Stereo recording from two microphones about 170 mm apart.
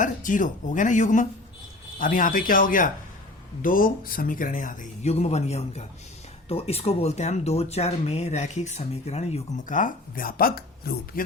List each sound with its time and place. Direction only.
0.0 s speech: 50° left (ahead or behind)